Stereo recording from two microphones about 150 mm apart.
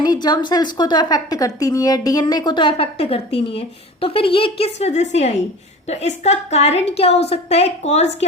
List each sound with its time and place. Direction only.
0.0 s a woman's voice: 30° left (ahead or behind); by 8.1 s 45° left (ahead or behind)